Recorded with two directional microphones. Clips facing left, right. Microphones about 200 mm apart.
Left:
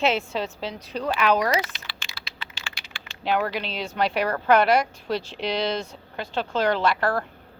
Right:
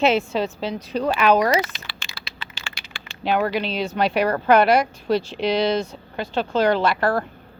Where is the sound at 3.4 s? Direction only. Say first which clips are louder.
Right 6 dB; 5° right (ahead or behind).